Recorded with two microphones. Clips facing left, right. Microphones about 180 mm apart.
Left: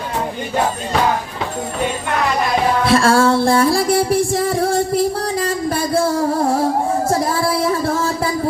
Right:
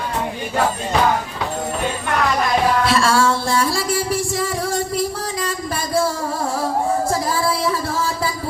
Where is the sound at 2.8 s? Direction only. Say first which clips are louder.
Left 4 dB; 55° left (ahead or behind).